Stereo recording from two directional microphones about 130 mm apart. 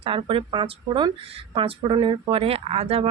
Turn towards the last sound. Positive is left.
turn(degrees=-50)  # may be behind; listen again after turning